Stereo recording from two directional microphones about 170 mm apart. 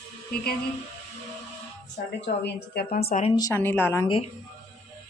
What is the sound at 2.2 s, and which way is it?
Speech, 85° left.